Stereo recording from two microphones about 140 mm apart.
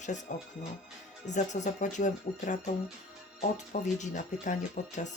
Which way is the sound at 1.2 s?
60° left (ahead or behind).